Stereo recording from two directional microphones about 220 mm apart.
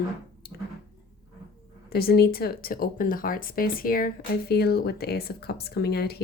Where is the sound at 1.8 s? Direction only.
45° left (ahead or behind).